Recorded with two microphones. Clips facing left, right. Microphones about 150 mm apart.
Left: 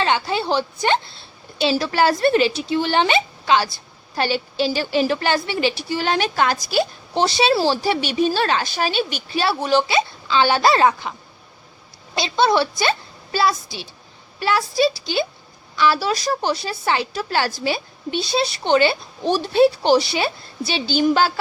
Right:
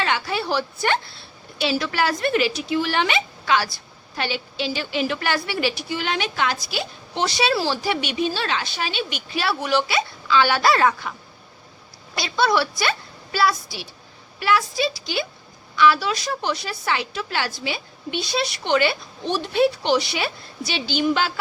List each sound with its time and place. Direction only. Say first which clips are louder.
0.0 s a woman's voice: left 4 dB; 25° left (ahead or behind)
4.2 s a woman's voice: left 6 dB; 40° left (ahead or behind); by 11.1 s 25° left (ahead or behind)
12.1 s a woman's voice: left 3 dB; 25° left (ahead or behind)